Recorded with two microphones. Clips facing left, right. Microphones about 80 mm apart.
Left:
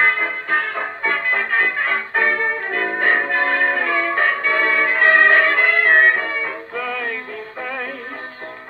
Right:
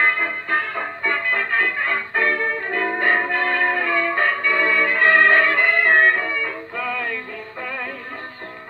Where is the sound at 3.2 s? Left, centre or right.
Centre.